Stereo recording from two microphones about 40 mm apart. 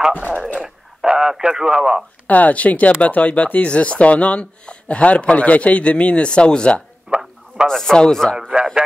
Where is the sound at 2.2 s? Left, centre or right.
Left.